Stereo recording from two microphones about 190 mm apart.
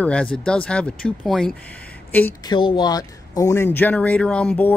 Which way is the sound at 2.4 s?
25° left (ahead or behind).